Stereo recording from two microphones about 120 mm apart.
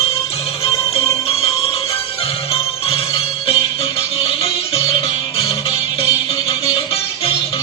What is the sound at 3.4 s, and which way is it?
Music, 55° left (ahead or behind).